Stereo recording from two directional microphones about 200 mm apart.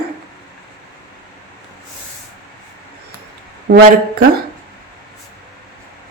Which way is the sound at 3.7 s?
50° right (ahead or behind).